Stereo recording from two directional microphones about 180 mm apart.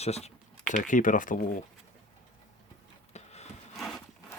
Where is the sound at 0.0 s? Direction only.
35° left (ahead or behind).